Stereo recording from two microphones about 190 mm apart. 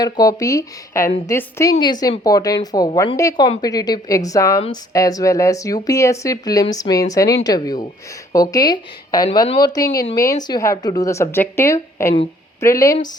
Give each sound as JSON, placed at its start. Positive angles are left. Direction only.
{"t": 0.0, "sound": "speech", "side_deg": 20}